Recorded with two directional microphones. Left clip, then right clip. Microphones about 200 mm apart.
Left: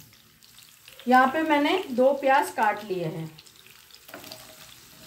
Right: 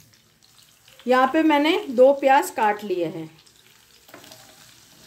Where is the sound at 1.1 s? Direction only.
60° right (ahead or behind).